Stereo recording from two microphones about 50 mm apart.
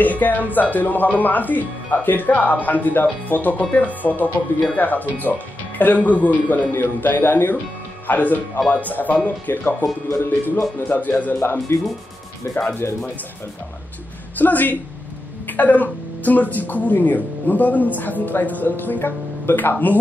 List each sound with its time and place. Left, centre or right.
0.0 s speech: left
11.7 s speech: left
12.4 s speech: left
12.8 s speech: left
14.3 s speech: left